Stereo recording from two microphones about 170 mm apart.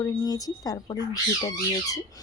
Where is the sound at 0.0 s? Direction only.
20° left (ahead or behind).